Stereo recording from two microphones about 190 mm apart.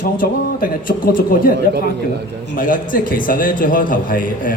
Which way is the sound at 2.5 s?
45° left (ahead or behind).